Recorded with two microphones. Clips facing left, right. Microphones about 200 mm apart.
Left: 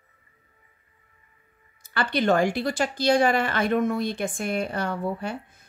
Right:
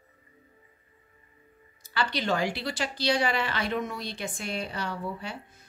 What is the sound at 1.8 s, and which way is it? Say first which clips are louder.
Speech: left 5 dB; 55° left (ahead or behind).